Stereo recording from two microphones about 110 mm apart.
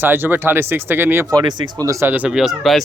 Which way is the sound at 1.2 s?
40° right (ahead or behind).